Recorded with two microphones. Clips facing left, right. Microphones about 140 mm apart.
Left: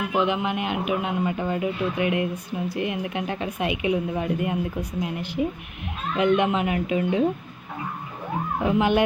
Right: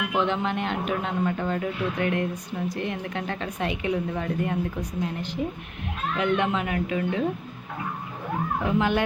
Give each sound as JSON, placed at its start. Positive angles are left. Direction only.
{"t": 0.1, "sound": "a man's voice", "side_deg": 10}
{"t": 8.6, "sound": "a man's voice", "side_deg": 15}